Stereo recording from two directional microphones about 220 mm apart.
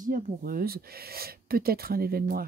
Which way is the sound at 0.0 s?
40° right (ahead or behind).